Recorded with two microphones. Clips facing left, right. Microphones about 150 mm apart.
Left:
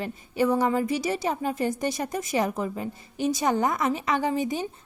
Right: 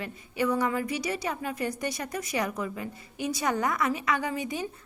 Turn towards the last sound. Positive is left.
turn(degrees=25)  # may be behind; listen again after turning